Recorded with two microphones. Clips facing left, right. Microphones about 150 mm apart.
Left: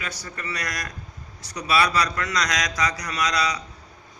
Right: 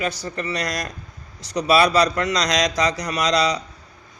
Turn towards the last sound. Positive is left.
turn(degrees=-20)  # may be behind; listen again after turning